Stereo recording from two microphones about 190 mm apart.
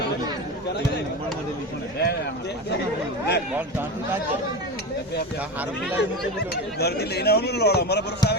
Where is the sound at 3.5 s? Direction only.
10° right (ahead or behind).